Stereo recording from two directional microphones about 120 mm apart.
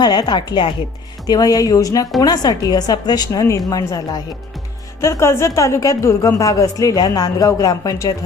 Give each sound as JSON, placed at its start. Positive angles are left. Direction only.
{"t": 0.0, "sound": "a woman's voice", "side_deg": 35}